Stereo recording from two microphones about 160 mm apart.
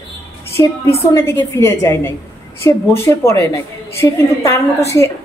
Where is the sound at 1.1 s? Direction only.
15° left (ahead or behind).